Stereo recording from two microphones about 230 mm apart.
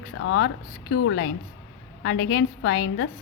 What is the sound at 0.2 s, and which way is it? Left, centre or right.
A woman's voice, left.